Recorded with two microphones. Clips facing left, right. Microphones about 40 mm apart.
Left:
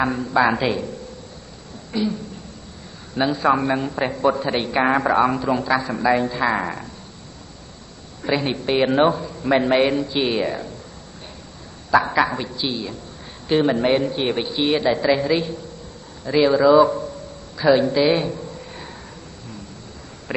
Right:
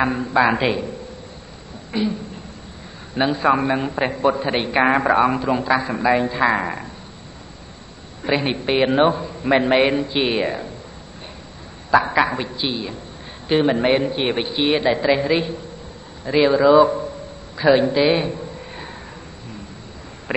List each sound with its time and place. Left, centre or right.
0.0 s a man's voice: right
1.9 s speech: right
3.2 s a man's voice: right
8.2 s a man's voice: right
11.9 s a man's voice: centre
17.6 s a sound: right
20.3 s a man's voice: right